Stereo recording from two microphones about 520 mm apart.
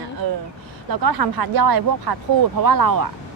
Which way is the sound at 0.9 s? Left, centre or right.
Right.